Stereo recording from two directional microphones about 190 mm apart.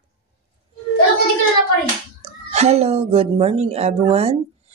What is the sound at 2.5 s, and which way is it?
Speech, 35° right (ahead or behind).